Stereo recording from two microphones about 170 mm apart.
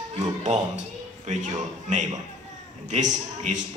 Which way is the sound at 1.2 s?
45° right (ahead or behind).